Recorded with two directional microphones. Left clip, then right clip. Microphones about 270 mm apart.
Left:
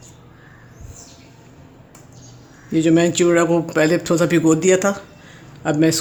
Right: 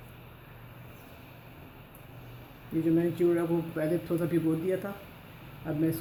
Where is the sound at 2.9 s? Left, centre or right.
Left.